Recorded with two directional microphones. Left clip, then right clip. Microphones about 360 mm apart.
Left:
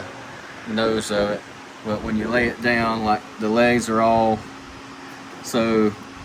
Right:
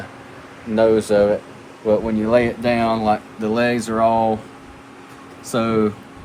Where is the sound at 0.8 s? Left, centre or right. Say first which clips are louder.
Right 7 dB; centre.